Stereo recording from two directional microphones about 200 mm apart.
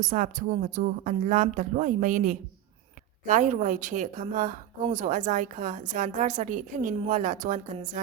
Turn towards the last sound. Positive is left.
turn(degrees=-40)  # may be behind; listen again after turning